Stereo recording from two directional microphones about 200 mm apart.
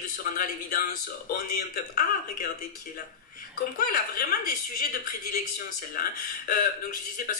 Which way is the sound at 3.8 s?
45° left (ahead or behind).